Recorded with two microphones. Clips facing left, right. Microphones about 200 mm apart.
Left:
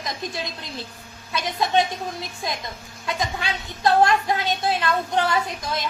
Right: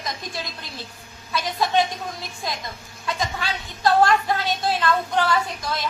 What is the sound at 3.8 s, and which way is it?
A woman's voice, 20° left (ahead or behind).